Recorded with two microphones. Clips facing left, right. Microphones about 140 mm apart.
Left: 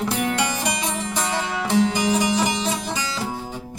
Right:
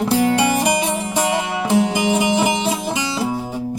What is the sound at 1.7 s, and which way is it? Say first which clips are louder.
Music: right 3 dB; 10° right (ahead or behind).